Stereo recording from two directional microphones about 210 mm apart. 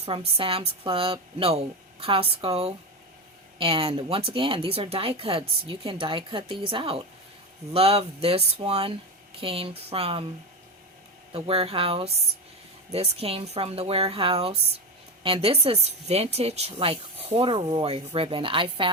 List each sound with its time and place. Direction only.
0.0 s speech: 25° right (ahead or behind)
11.3 s speech: 25° right (ahead or behind)